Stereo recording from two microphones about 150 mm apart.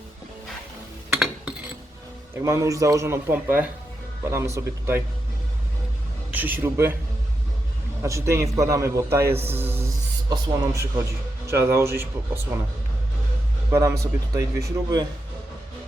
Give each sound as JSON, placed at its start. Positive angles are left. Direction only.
{"t": 2.3, "sound": "a man's voice", "side_deg": -20}
{"t": 6.3, "sound": "a man's voice", "side_deg": -10}
{"t": 8.0, "sound": "a man's voice", "side_deg": -20}
{"t": 13.7, "sound": "a man's voice", "side_deg": -20}